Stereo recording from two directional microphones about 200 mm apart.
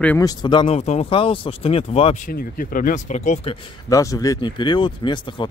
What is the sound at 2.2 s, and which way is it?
Speech, 45° left (ahead or behind).